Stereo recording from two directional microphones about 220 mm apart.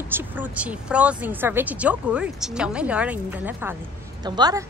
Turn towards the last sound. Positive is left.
turn(degrees=-20)  # may be behind; listen again after turning